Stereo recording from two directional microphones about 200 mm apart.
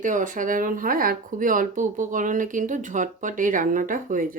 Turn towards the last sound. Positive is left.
turn(degrees=-40)  # may be behind; listen again after turning